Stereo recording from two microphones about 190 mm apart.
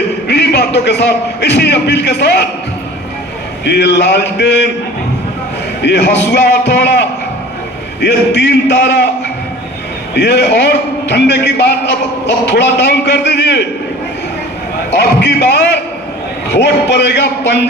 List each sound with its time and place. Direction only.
0.3 s a man's voice: 60° left (ahead or behind)
3.6 s a man's voice: 65° left (ahead or behind)
5.8 s a man's voice: 65° left (ahead or behind)
10.2 s a man's voice: 60° left (ahead or behind)
14.9 s a man's voice: 65° left (ahead or behind)